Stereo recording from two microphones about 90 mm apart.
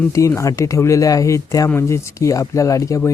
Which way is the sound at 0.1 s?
35° left (ahead or behind).